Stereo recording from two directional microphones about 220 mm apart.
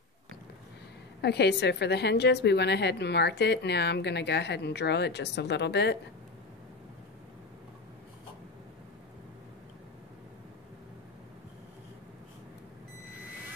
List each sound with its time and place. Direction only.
1.2 s a woman's voice: 50° left (ahead or behind)